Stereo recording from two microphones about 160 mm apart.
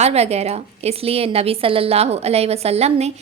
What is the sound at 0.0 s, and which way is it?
A woman's voice, 40° right (ahead or behind).